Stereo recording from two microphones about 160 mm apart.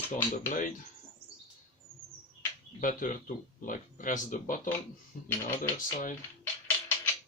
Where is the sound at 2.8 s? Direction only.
55° left (ahead or behind).